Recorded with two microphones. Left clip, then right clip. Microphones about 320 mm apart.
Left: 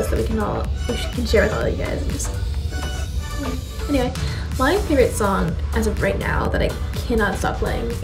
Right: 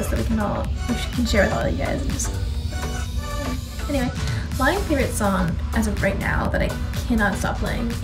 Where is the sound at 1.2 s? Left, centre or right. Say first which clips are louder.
Left 2 dB; centre.